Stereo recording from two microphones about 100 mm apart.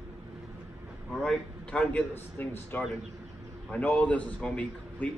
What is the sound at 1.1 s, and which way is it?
Speech, 5° left (ahead or behind).